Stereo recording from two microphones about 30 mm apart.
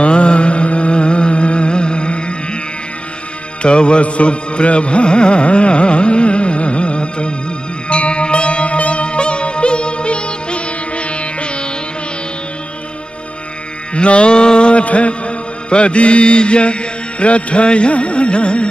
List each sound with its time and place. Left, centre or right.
0.0 s music: left
3.6 s music: left
13.9 s music: left